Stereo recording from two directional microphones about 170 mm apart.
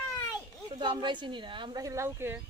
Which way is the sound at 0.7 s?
25° right (ahead or behind).